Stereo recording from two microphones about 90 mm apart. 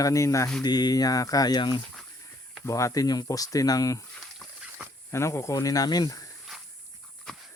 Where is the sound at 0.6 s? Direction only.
50° left (ahead or behind).